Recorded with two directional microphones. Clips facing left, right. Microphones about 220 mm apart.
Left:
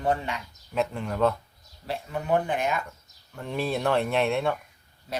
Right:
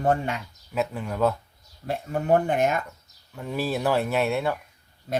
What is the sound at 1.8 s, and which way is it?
Speech, 50° right (ahead or behind).